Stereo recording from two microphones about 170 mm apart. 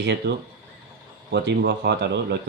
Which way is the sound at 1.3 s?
80° right.